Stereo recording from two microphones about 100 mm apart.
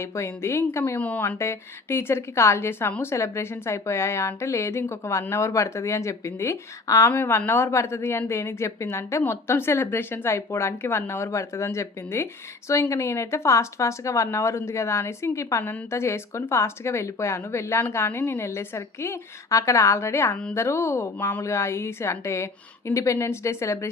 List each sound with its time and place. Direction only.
0.0 s a woman's voice: 30° left (ahead or behind)
0.9 s speech: 15° left (ahead or behind)
1.4 s a woman's voice: 25° left (ahead or behind)
20.3 s speech: 15° left (ahead or behind)
20.6 s a woman's voice: 25° left (ahead or behind)